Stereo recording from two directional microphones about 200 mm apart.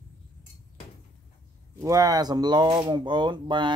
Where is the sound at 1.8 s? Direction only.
15° right (ahead or behind).